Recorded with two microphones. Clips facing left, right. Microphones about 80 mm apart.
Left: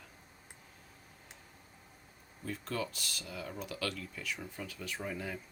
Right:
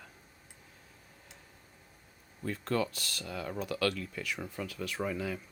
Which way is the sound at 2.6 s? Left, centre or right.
Right.